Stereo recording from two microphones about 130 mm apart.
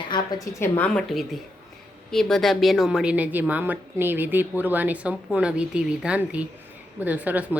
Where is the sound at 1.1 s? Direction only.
Centre (ahead or behind).